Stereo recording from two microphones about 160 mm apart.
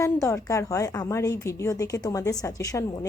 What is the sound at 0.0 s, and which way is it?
Speech, 20° left (ahead or behind).